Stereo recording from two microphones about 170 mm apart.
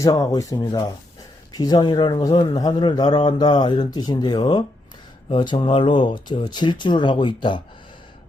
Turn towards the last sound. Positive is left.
turn(degrees=30)  # may be behind; listen again after turning